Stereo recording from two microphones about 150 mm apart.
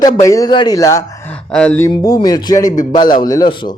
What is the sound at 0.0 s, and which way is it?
Speech, 20° left (ahead or behind).